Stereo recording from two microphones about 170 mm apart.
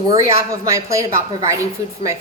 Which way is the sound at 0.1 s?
15° right (ahead or behind).